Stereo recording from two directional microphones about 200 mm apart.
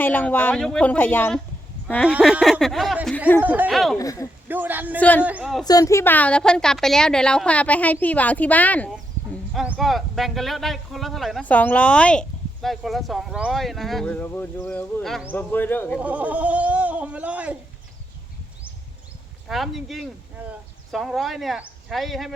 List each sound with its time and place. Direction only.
0.0 s a woman's voice: 10° left (ahead or behind)
2.0 s speech: 5° right (ahead or behind)
3.9 s a woman's voice: 15° left (ahead or behind)
4.4 s speech: 10° right (ahead or behind)
4.9 s a woman's voice: 10° left (ahead or behind)
5.2 s speech: 5° right (ahead or behind)
5.6 s a woman's voice: 15° left (ahead or behind)
16.0 s speech: 5° right (ahead or behind)
19.5 s speech: centre (ahead or behind)